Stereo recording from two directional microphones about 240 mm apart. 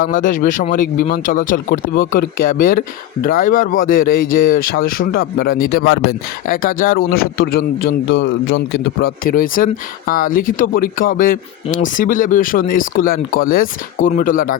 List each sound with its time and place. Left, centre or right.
0.0 s speech: left